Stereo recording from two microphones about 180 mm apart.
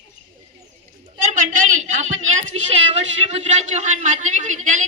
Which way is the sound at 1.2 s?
45° right (ahead or behind).